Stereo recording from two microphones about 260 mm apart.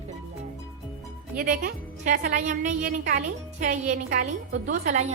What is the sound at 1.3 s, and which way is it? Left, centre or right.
A woman's voice, right.